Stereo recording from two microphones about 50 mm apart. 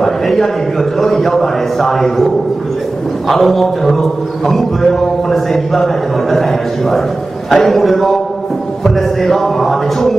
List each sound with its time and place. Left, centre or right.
0.0 s a sound: centre
0.9 s a man's voice: centre
3.3 s a man's voice: centre
5.3 s a man's voice: centre
7.5 s a man's voice: centre